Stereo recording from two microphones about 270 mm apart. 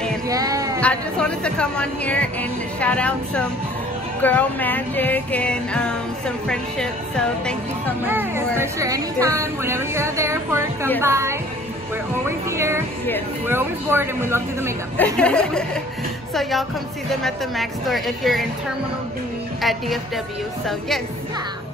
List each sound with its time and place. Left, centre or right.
0.3 s a sound: centre
0.7 s music: centre
8.0 s speech: centre
15.1 s music: centre
19.6 s music: centre